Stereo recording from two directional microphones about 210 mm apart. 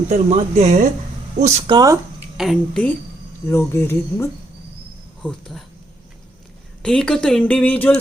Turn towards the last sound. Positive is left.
turn(degrees=5)  # may be behind; listen again after turning